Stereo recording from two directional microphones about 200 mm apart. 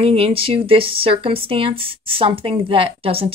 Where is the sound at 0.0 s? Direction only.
30° right (ahead or behind).